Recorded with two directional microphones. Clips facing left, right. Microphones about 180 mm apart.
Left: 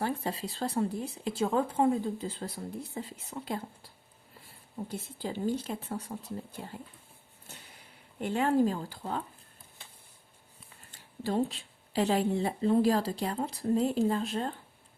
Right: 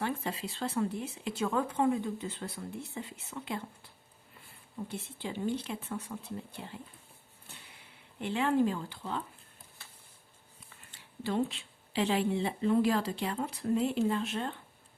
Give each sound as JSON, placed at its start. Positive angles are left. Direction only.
{"t": 0.0, "sound": "speech", "side_deg": 35}
{"t": 4.9, "sound": "speech", "side_deg": 40}
{"t": 9.8, "sound": "a sound", "side_deg": 20}
{"t": 10.9, "sound": "speech", "side_deg": 40}